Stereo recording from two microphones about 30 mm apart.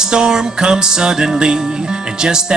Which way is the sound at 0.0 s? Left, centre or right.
Right.